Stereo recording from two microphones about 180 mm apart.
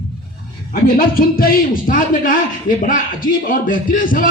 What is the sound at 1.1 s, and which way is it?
Speech, 55° left (ahead or behind).